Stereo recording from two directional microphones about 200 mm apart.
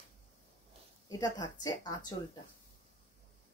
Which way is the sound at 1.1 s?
20° left (ahead or behind).